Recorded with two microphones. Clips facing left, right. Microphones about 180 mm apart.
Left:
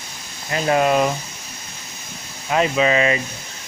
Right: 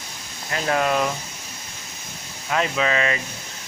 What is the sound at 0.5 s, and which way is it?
Speech, 15° left (ahead or behind).